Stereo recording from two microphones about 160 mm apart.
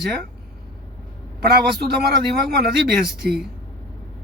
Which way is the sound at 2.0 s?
90° right.